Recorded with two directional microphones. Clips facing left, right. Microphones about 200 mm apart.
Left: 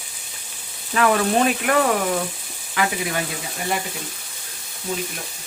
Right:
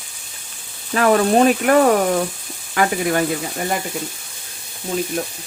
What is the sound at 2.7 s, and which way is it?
Speech, 50° right (ahead or behind).